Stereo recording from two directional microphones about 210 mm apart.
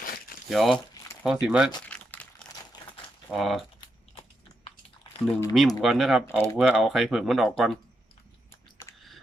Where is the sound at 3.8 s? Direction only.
25° left (ahead or behind).